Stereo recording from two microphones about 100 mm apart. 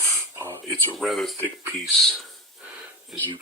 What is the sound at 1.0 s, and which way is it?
Speech, centre (ahead or behind).